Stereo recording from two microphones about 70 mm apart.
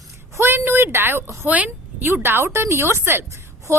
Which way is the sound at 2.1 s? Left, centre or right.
Right.